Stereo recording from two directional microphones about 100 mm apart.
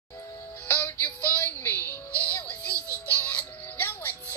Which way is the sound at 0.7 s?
25° left (ahead or behind).